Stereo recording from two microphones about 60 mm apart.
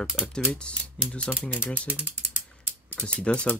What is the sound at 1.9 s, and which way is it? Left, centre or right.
Ratchet, right.